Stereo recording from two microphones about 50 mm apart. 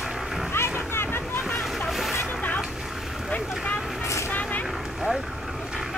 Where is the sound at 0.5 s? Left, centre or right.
Left.